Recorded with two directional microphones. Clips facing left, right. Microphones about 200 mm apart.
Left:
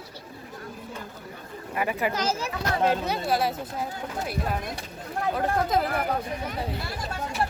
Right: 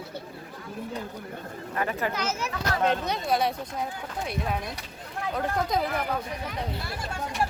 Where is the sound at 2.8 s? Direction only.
5° left (ahead or behind).